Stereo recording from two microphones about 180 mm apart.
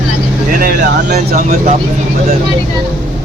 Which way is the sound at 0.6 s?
55° right (ahead or behind).